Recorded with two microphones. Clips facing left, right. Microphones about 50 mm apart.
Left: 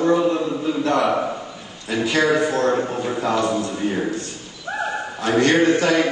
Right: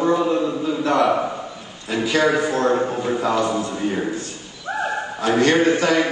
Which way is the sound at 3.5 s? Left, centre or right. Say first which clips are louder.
Even; centre.